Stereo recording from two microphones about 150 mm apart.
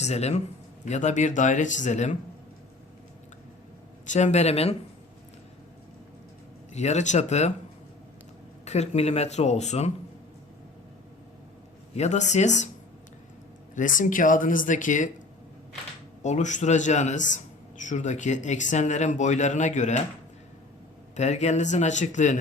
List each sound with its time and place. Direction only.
0.0 s a man's voice: 45° left (ahead or behind)
4.0 s a man's voice: 50° left (ahead or behind)
6.7 s a man's voice: 50° left (ahead or behind)
8.6 s a man's voice: 45° left (ahead or behind)
11.9 s a man's voice: 50° left (ahead or behind)
13.7 s speech: 60° left (ahead or behind)
16.2 s a man's voice: 50° left (ahead or behind)
21.2 s a man's voice: 50° left (ahead or behind)